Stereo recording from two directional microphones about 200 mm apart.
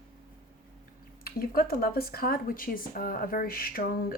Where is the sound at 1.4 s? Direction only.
45° left (ahead or behind).